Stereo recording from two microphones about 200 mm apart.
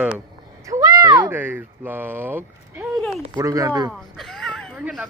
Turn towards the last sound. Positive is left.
turn(degrees=-5)  # may be behind; listen again after turning